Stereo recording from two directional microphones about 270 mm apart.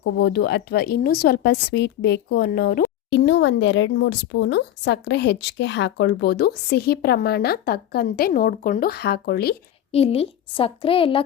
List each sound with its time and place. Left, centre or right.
0.0 s a woman's voice: left
9.9 s a woman's voice: left